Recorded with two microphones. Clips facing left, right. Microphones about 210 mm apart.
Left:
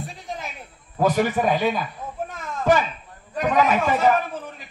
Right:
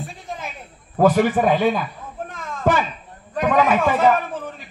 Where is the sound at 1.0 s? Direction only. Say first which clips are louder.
Right 4 dB; 50° right (ahead or behind).